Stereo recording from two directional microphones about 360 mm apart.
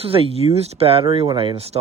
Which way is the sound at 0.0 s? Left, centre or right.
Centre.